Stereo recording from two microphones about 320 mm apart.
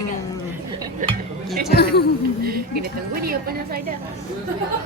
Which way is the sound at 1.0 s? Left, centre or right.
Right.